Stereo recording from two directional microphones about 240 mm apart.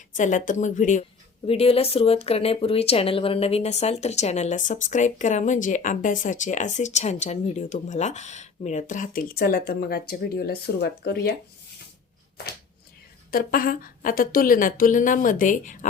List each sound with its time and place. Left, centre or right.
0.2 s a woman's voice: left
13.3 s a woman's voice: left